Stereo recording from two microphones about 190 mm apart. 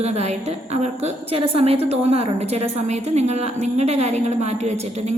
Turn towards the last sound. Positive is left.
turn(degrees=-35)  # may be behind; listen again after turning